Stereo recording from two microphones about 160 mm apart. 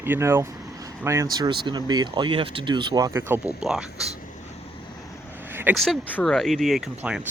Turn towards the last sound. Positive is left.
turn(degrees=-5)  # may be behind; listen again after turning